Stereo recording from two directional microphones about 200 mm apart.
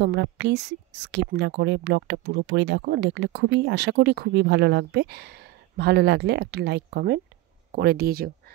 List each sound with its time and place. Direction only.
0.0 s speech: 60° right (ahead or behind)